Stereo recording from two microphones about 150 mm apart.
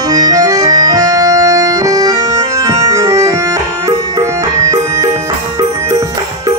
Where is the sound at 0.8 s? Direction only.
25° right (ahead or behind).